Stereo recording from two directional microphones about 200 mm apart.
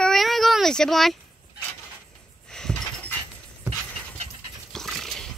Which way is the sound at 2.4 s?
5° left (ahead or behind).